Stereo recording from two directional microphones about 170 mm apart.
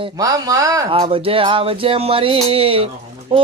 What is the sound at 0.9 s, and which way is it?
A man's voice, 35° right (ahead or behind).